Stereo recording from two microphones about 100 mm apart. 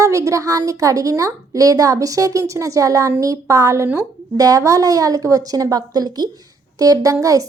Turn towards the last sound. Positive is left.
turn(degrees=-35)  # may be behind; listen again after turning